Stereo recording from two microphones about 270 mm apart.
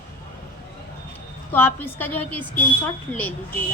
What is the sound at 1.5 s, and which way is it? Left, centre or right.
A woman's voice, centre.